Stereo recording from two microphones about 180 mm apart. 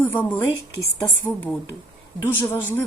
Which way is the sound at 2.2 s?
10° left (ahead or behind).